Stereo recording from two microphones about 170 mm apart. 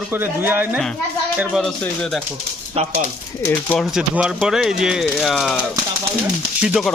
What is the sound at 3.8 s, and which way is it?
Speech, 5° right (ahead or behind).